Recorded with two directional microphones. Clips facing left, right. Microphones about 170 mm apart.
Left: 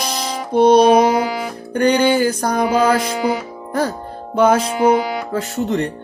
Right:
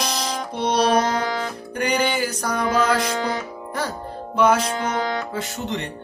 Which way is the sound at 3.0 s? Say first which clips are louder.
Left 5 dB; 10° left (ahead or behind).